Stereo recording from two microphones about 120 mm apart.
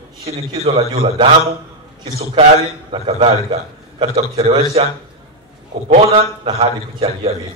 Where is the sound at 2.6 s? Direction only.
55° right (ahead or behind).